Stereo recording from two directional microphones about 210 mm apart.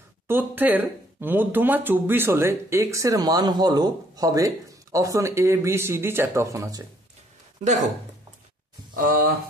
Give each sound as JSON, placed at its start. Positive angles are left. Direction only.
{"t": 0.3, "sound": "speech", "side_deg": -10}
{"t": 7.6, "sound": "speech", "side_deg": -35}